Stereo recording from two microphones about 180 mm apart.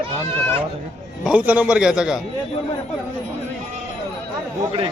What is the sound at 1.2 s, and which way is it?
Speech, 5° right (ahead or behind).